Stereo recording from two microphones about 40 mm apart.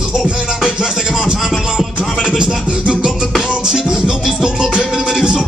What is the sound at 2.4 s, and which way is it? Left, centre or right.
Music, right.